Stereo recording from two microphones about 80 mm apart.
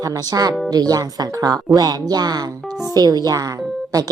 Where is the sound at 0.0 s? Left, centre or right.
Right.